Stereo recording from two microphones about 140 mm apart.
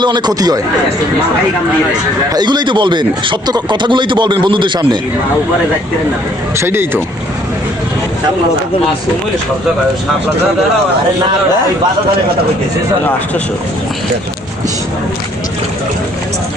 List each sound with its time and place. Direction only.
0.0 s a man's voice: 30° right (ahead or behind)
2.3 s speech: 30° right (ahead or behind)
6.6 s speech: 15° right (ahead or behind)